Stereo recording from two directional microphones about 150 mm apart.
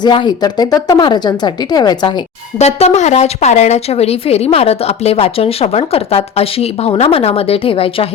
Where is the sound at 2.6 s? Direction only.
45° left (ahead or behind).